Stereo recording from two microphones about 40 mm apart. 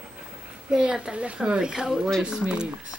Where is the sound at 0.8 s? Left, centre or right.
Right.